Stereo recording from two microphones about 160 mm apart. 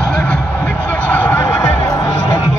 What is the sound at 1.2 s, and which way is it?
Music, 15° left (ahead or behind).